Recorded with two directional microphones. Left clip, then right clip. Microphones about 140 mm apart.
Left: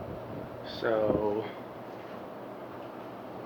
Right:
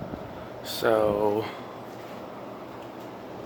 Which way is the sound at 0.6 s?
55° right (ahead or behind).